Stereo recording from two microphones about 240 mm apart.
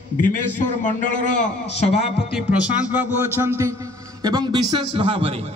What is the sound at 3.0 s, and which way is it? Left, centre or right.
A man's voice, centre.